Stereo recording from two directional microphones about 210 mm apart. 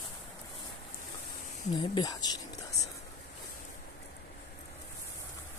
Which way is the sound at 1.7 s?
20° left (ahead or behind).